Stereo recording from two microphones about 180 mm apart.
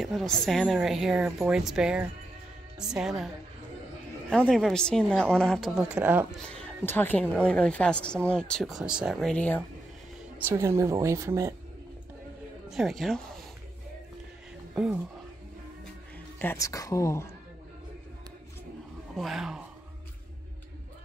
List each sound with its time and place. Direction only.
0.0 s a woman's voice: centre (ahead or behind)
4.3 s a woman's voice: 5° left (ahead or behind)
6.9 s a woman's voice: 10° left (ahead or behind)
10.5 s speech: 15° right (ahead or behind)
12.6 s a woman's voice: centre (ahead or behind)
16.3 s speech: 15° left (ahead or behind)
19.1 s a woman's voice: centre (ahead or behind)